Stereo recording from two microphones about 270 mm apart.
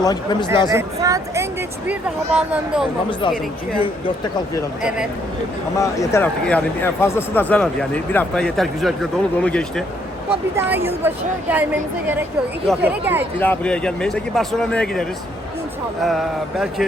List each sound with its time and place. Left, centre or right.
0.0 s speech: centre
0.7 s a woman's voice: centre
3.1 s speech: centre
4.8 s speech: centre
5.7 s speech: centre
10.6 s a woman's voice: centre
13.4 s speech: centre
16.0 s speech: centre